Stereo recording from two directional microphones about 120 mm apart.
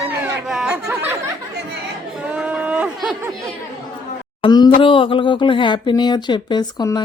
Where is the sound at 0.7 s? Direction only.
20° right (ahead or behind).